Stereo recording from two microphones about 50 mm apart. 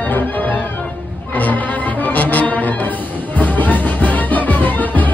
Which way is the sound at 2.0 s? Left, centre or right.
Left.